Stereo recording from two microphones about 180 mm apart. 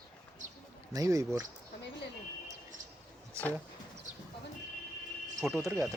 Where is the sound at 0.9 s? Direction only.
20° right (ahead or behind).